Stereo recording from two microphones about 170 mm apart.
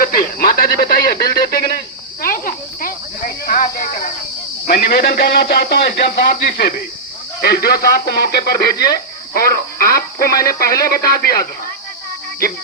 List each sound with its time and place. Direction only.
0.0 s speech: 55° left (ahead or behind)
2.2 s snake: 55° left (ahead or behind)
4.6 s a man's voice: 65° left (ahead or behind)